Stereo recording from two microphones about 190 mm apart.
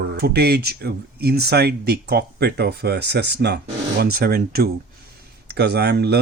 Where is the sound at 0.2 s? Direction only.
55° right (ahead or behind).